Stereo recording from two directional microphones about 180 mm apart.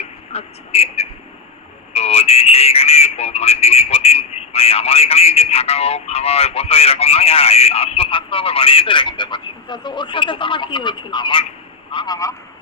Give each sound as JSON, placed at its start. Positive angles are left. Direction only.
{"t": 0.3, "sound": "a man's voice", "side_deg": 35}